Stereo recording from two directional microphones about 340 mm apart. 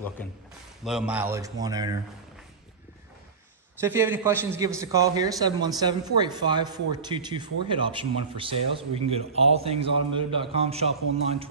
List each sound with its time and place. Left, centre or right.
0.2 s a man's voice: centre
3.8 s a man's voice: centre